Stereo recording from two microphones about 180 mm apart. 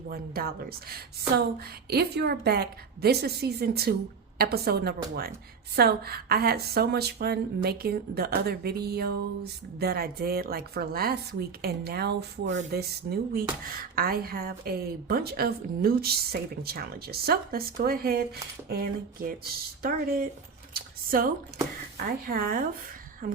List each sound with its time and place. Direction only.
0.1 s a woman's voice: 55° right (ahead or behind)
22.3 s speech: 50° right (ahead or behind)